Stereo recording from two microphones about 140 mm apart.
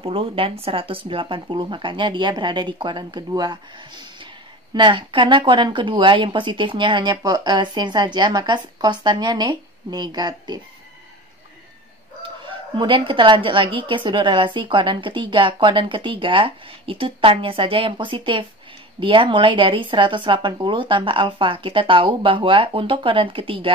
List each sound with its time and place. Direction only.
0.0 s speech: 40° right (ahead or behind)
12.2 s speech: 35° right (ahead or behind)